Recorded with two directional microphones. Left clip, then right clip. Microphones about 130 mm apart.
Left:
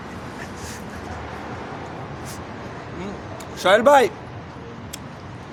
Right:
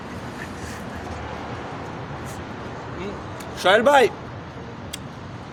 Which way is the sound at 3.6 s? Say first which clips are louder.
Left 1 dB; 30° left (ahead or behind).